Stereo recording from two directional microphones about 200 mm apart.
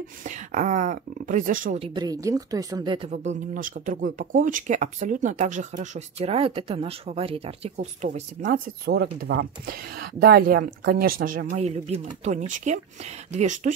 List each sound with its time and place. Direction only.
0.2 s speech: 40° right (ahead or behind)
1.8 s speech: 20° right (ahead or behind)
3.1 s speech: 40° right (ahead or behind)